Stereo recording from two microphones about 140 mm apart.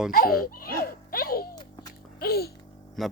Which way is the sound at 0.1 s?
90° left.